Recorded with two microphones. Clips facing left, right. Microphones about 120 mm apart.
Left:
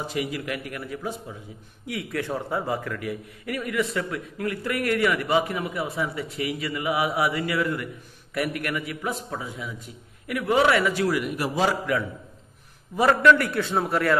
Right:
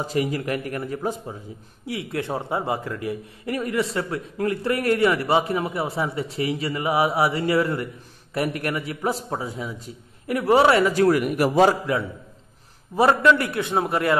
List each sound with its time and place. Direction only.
0.0 s a man's voice: 40° right (ahead or behind)
1.9 s a man's voice: 25° right (ahead or behind); by 11.7 s 55° right (ahead or behind)
12.9 s a man's voice: 25° right (ahead or behind)